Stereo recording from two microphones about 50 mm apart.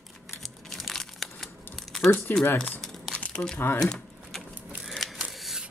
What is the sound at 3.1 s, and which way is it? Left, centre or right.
Crumpling, left.